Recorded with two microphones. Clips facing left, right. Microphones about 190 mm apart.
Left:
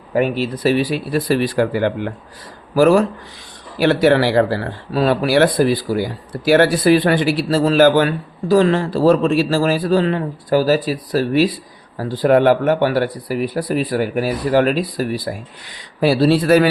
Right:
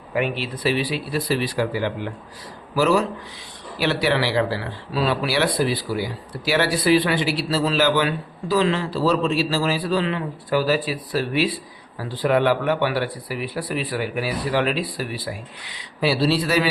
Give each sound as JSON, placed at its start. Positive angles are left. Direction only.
{"t": 0.1, "sound": "speech", "side_deg": 40}